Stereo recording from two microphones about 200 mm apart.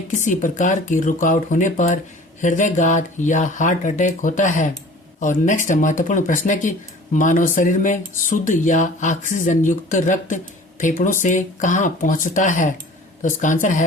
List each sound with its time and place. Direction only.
0.3 s speech: 40° left (ahead or behind)